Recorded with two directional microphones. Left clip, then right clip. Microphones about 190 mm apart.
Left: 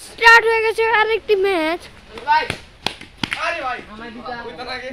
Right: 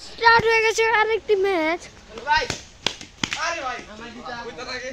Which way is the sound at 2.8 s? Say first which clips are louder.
Left 2 dB; 40° left (ahead or behind).